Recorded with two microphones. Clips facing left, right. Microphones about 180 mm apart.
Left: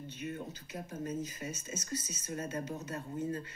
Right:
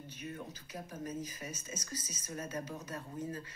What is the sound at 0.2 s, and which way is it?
Speech, 30° left (ahead or behind).